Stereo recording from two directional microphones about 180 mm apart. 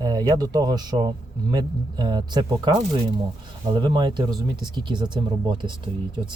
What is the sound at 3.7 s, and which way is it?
Speech, 25° right (ahead or behind).